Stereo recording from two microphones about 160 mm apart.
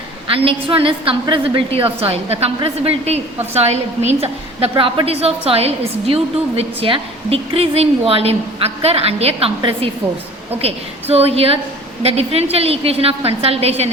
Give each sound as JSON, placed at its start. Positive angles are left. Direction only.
{"t": 0.3, "sound": "a woman's voice", "side_deg": -35}